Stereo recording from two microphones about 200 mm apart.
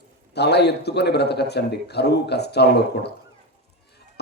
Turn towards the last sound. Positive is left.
turn(degrees=55)  # may be behind; listen again after turning